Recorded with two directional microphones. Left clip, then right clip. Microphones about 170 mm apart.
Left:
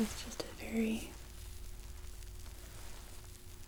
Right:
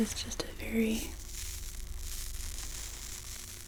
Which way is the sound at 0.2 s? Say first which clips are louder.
Right 6 dB; 75° right (ahead or behind).